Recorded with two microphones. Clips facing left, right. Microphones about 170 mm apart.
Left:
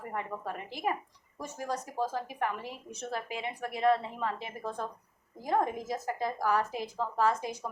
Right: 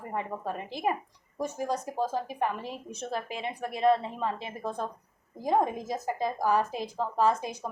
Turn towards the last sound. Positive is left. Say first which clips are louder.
# right 3 dB
turn(degrees=-20)  # may be behind; listen again after turning